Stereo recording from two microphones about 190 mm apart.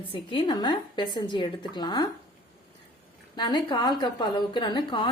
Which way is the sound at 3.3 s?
25° left (ahead or behind).